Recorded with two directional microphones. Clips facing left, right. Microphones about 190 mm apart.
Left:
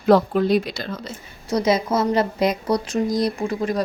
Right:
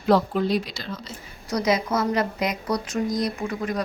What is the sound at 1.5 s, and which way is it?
Speech, 25° left (ahead or behind).